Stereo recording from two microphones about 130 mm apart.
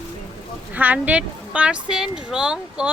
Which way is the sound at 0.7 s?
10° right (ahead or behind).